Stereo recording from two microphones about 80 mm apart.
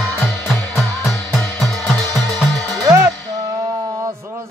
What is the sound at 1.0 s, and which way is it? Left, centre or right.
Music, centre.